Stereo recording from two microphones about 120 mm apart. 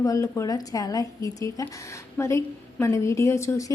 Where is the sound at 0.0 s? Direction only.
30° left (ahead or behind).